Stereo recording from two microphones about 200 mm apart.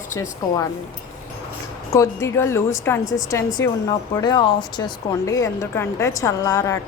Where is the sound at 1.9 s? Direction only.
15° left (ahead or behind).